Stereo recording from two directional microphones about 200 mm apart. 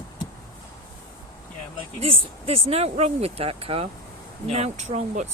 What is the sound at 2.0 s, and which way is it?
Speech, 30° right (ahead or behind).